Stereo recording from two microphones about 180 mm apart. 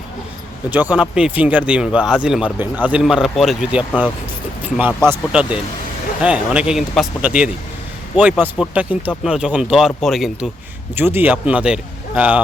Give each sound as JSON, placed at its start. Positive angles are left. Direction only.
{"t": 0.7, "sound": "speech", "side_deg": -10}
{"t": 10.9, "sound": "speech", "side_deg": -10}